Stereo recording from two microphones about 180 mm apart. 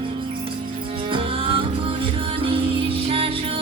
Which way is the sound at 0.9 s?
30° right (ahead or behind).